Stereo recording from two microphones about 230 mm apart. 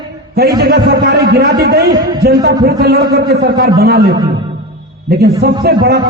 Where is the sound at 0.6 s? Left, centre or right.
Right.